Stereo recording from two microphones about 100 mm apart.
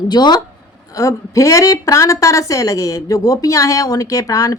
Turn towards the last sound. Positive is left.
turn(degrees=35)  # may be behind; listen again after turning